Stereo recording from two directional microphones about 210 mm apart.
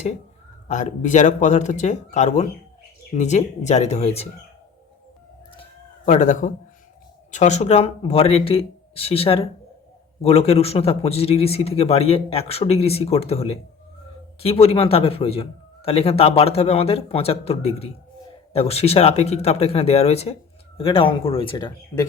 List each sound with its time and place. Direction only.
0.7 s speech: 35° left (ahead or behind)
6.1 s a man's voice: 40° left (ahead or behind); by 22.0 s 20° left (ahead or behind)